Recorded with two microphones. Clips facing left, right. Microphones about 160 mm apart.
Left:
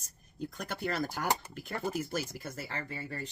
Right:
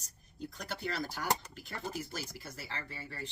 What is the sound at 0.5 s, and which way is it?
Speech, 55° left (ahead or behind).